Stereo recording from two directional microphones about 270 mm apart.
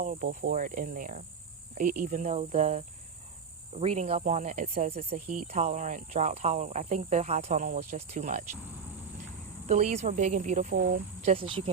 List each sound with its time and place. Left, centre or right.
0.0 s speech: right
9.6 s speech: right